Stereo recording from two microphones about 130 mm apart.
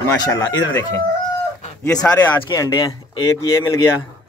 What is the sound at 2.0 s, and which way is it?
Speech, 15° left (ahead or behind).